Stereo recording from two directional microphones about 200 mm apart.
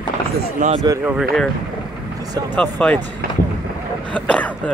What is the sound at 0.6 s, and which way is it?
Speech, 40° right (ahead or behind).